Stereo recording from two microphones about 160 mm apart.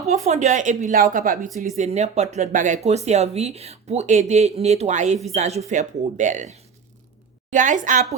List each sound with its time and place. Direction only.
0.3 s speech: 45° right (ahead or behind)